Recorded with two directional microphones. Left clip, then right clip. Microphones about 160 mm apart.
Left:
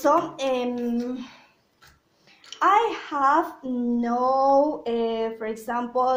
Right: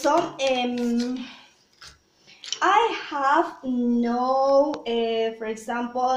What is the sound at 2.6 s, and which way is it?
Speech, 55° left (ahead or behind).